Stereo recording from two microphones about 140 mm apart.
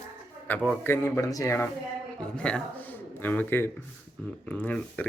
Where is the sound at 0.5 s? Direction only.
10° left (ahead or behind).